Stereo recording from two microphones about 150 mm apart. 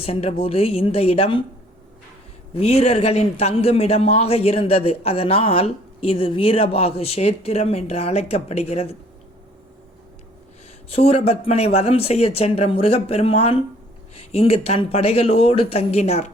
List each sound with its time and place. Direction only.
0.0 s a man's voice: 40° left (ahead or behind)
2.5 s a man's voice: 40° left (ahead or behind)
10.9 s a man's voice: 40° left (ahead or behind)